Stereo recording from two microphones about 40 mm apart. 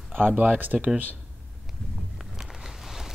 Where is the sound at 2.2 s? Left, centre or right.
Centre.